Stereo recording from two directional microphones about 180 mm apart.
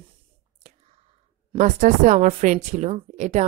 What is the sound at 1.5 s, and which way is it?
Speech, 40° right (ahead or behind).